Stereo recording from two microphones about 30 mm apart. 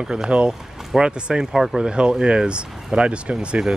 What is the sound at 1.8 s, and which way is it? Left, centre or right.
Speech, right.